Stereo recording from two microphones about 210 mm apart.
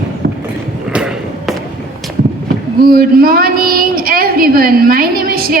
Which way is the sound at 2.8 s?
45° right (ahead or behind).